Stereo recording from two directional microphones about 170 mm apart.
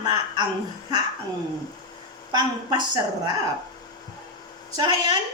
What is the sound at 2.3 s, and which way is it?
Speech, 25° right (ahead or behind).